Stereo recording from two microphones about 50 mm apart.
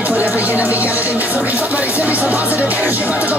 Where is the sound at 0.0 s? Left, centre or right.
Right.